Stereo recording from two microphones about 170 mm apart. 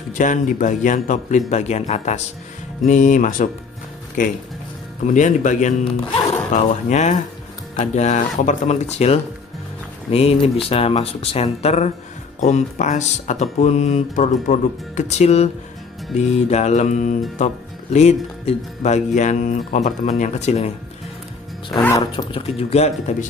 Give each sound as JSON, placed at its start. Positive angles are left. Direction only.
{"t": 0.2, "sound": "speech", "side_deg": 50}
{"t": 5.0, "sound": "speech", "side_deg": 45}
{"t": 21.6, "sound": "speech", "side_deg": 0}
{"t": 21.9, "sound": "speech", "side_deg": 25}